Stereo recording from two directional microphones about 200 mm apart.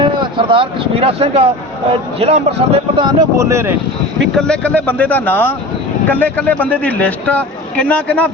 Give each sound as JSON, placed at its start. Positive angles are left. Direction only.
{"t": 0.0, "sound": "speech", "side_deg": -25}
{"t": 4.4, "sound": "a man's voice", "side_deg": 5}